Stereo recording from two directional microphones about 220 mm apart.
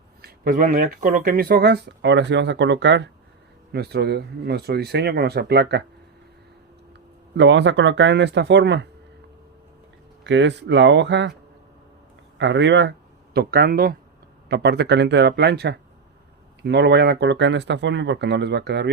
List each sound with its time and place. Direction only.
0.2 s speech: 45° right (ahead or behind)
7.3 s speech: 55° right (ahead or behind)
10.2 s speech: 55° right (ahead or behind)
12.4 s speech: 55° right (ahead or behind)